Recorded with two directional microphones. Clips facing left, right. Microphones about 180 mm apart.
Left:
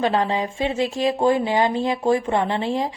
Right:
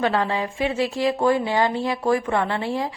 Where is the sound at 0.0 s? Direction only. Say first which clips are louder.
Left 1 dB; 20° left (ahead or behind).